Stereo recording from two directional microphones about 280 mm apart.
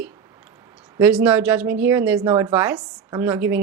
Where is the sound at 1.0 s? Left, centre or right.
Centre.